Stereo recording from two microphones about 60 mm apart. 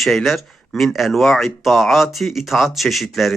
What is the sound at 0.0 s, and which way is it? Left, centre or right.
Speech, centre.